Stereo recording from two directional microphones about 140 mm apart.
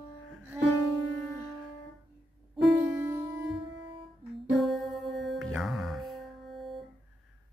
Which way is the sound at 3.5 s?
40° right (ahead or behind).